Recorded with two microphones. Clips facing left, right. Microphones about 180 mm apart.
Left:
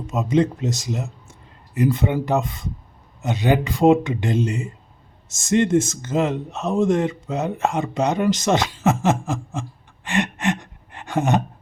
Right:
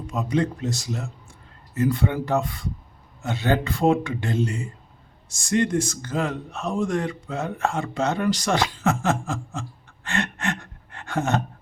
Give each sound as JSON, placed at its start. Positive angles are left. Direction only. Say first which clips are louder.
{"t": 0.1, "sound": "a man's voice", "louder": "left 5 dB", "side_deg": 20}